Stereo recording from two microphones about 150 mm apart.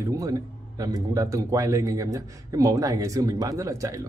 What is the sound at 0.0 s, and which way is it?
A man's voice, 20° right (ahead or behind).